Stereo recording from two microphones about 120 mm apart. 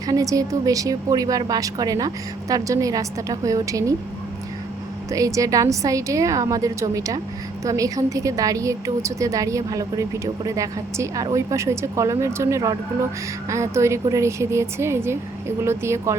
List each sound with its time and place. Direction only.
0.1 s a woman's voice: 30° right (ahead or behind)
5.1 s a woman's voice: 30° right (ahead or behind)